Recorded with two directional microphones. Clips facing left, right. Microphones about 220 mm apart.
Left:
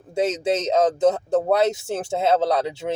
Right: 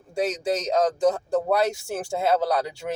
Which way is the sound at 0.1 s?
20° left (ahead or behind).